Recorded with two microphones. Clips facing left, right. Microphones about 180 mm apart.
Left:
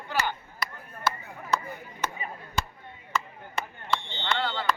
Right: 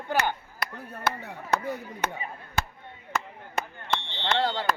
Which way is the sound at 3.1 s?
45° right (ahead or behind).